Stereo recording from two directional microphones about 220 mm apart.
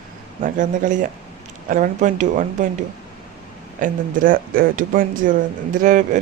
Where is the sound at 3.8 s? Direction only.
40° right (ahead or behind).